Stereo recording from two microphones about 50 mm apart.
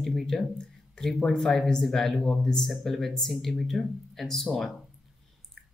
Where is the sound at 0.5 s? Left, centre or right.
Centre.